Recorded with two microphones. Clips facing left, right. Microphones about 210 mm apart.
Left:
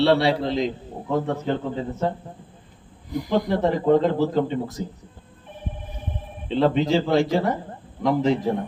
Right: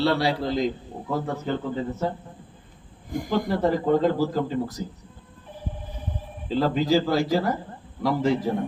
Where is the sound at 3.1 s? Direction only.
50° right (ahead or behind).